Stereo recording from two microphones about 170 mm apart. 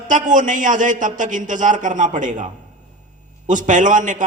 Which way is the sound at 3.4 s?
45° right (ahead or behind).